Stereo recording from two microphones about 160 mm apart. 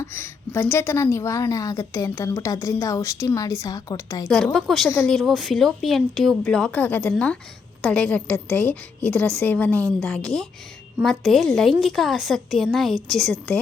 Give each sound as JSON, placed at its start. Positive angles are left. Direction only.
{"t": 0.0, "sound": "a woman's voice", "side_deg": 15}
{"t": 4.5, "sound": "a woman's voice", "side_deg": 0}